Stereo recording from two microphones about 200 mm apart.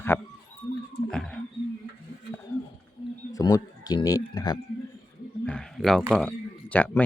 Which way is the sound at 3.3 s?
20° left (ahead or behind).